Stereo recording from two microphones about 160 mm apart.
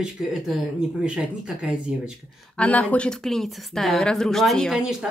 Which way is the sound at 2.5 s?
10° left (ahead or behind).